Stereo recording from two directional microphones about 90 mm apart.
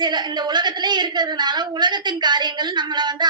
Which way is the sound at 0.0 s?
55° right (ahead or behind).